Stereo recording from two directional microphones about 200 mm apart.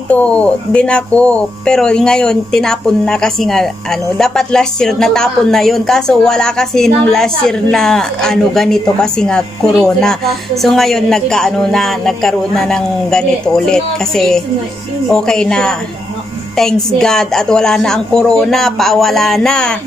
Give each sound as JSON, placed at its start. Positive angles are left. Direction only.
{"t": 0.1, "sound": "speech", "side_deg": 5}